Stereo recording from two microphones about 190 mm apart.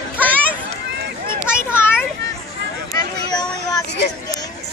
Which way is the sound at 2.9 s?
20° left (ahead or behind).